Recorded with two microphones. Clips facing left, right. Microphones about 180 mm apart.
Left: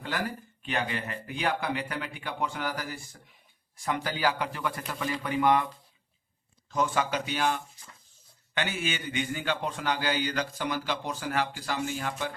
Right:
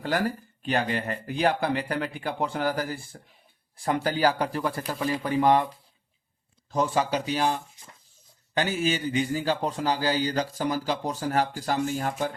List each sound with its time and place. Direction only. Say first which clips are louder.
0.0 s a man's voice: right 6 dB; 40° right (ahead or behind)
6.7 s a man's voice: right 3 dB; 30° right (ahead or behind)